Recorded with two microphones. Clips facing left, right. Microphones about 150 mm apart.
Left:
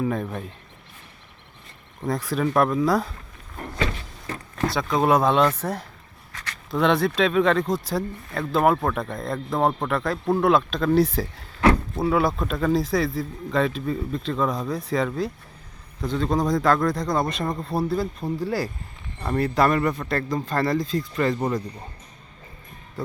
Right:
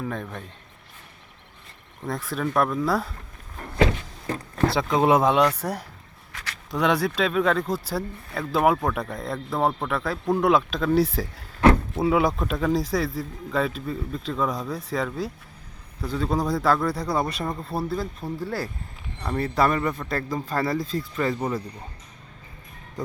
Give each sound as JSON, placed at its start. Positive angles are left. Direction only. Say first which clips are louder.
{"t": 0.0, "sound": "speech", "louder": "left 6 dB", "side_deg": 10}
{"t": 2.0, "sound": "a man's voice", "louder": "left 4 dB", "side_deg": 0}
{"t": 4.6, "sound": "a man's voice", "louder": "right 1 dB", "side_deg": -25}
{"t": 11.7, "sound": "vehicle", "louder": "right 1 dB", "side_deg": 0}
{"t": 12.1, "sound": "a man's voice", "louder": "left 1 dB", "side_deg": -10}